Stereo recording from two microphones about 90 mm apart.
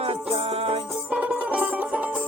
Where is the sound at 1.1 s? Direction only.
15° right (ahead or behind).